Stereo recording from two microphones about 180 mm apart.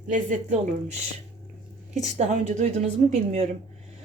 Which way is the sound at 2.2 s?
40° right (ahead or behind).